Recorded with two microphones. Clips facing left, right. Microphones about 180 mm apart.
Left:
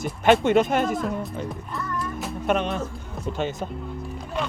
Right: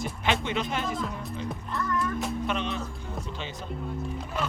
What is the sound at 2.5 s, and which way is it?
Speech, 50° left (ahead or behind).